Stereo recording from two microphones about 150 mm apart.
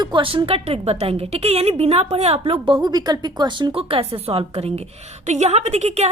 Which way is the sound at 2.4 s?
35° right (ahead or behind).